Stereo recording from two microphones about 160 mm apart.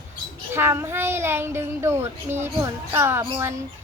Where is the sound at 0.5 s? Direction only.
15° right (ahead or behind).